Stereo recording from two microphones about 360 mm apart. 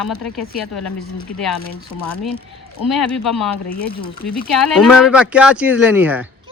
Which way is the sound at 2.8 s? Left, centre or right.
Centre.